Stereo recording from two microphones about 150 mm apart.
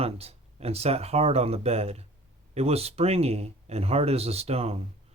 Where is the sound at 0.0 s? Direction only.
40° right (ahead or behind).